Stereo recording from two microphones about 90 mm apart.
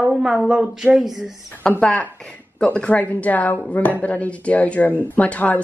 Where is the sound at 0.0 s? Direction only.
15° right (ahead or behind).